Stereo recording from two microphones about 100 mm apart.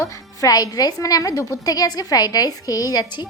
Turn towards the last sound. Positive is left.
turn(degrees=40)  # may be behind; listen again after turning